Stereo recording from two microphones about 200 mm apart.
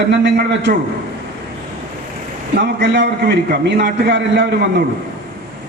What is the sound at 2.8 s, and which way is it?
A man's voice, 60° right (ahead or behind).